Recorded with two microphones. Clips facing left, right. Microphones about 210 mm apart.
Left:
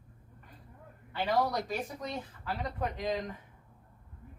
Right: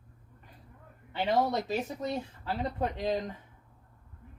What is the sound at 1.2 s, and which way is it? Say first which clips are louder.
Speech: right 2 dB; 25° right (ahead or behind).